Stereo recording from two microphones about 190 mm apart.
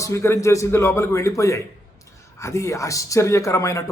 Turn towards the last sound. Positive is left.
turn(degrees=15)  # may be behind; listen again after turning